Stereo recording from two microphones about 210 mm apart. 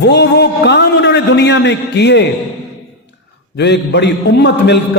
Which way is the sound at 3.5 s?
55° left (ahead or behind).